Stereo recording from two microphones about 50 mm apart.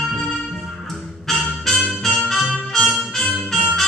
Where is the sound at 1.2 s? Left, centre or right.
Centre.